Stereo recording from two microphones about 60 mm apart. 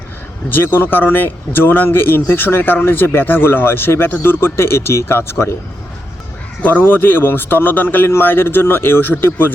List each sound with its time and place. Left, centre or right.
0.5 s speech: left
6.6 s speech: left